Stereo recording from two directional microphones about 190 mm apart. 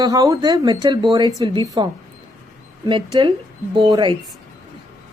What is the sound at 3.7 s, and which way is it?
Speech, 25° right (ahead or behind).